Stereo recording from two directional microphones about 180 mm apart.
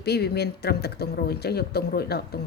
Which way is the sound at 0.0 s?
65° left (ahead or behind).